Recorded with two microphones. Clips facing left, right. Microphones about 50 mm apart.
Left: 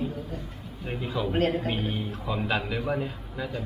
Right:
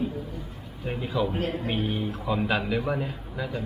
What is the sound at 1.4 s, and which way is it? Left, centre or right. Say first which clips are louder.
Speech: left 4 dB; left.